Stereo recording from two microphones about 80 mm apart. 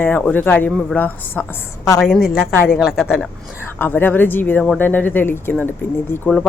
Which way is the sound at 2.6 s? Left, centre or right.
Centre.